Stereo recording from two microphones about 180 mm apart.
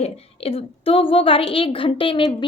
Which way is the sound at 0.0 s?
35° left (ahead or behind).